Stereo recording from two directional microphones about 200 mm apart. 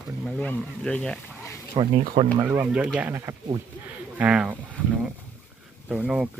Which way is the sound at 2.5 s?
10° right (ahead or behind).